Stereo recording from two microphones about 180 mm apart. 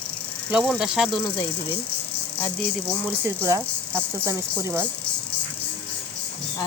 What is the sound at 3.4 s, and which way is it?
Speech, 15° right (ahead or behind).